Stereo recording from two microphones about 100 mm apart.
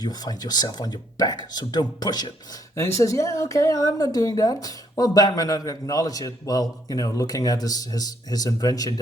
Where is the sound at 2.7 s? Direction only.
30° left (ahead or behind).